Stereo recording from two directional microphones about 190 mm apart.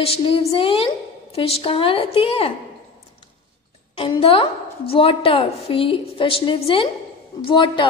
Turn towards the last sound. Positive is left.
turn(degrees=25)  # may be behind; listen again after turning